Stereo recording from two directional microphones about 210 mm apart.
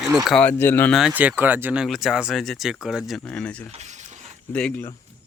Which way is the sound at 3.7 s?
35° right (ahead or behind).